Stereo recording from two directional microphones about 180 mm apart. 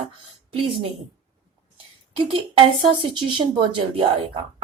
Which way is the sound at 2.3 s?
30° right (ahead or behind).